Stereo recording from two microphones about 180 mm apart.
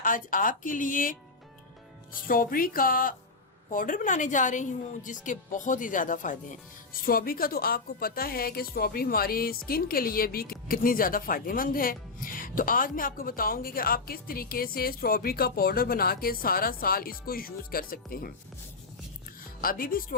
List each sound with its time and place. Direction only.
0.0 s a woman's voice: 50° left (ahead or behind)
2.2 s a woman's voice: 50° left (ahead or behind)
19.6 s a woman's voice: 55° left (ahead or behind)